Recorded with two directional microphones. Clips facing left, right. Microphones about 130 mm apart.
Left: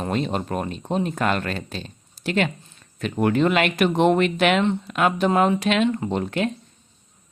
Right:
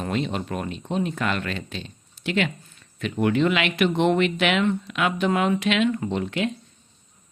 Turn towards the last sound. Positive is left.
turn(degrees=40)  # may be behind; listen again after turning